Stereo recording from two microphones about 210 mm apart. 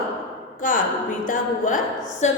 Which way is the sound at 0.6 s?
40° left (ahead or behind).